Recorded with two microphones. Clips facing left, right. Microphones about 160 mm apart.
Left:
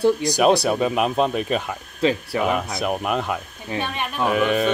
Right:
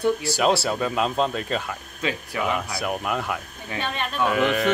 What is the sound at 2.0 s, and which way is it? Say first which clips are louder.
Speech: left 6 dB; 30° left (ahead or behind).